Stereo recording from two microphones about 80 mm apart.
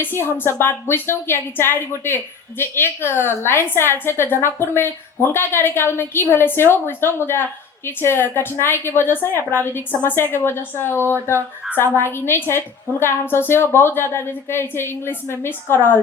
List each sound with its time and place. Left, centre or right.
0.0 s a woman's voice: left